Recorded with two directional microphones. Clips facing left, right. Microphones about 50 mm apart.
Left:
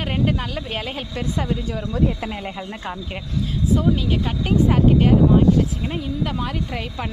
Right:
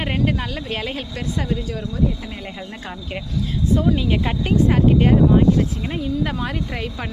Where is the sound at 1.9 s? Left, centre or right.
Left.